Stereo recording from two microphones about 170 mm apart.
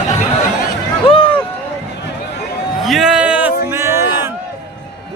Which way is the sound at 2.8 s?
Centre (ahead or behind).